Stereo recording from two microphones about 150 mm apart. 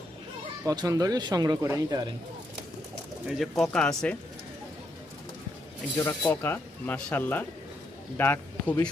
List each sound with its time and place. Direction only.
0.6 s speech: 25° right (ahead or behind)
3.2 s speech: centre (ahead or behind)
6.0 s speech: 15° left (ahead or behind)